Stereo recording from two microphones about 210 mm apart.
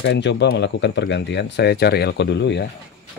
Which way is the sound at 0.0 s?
55° left (ahead or behind).